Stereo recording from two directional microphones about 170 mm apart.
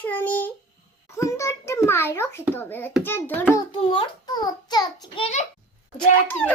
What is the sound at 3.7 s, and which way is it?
A child's voice, 30° left (ahead or behind).